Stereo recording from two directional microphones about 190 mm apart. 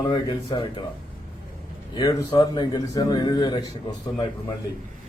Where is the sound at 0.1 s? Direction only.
25° left (ahead or behind).